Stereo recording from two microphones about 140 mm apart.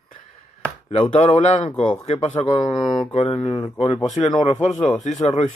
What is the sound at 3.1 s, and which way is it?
Speech, 50° left (ahead or behind).